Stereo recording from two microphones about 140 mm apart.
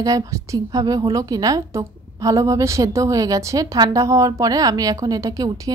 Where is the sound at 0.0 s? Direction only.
25° right (ahead or behind).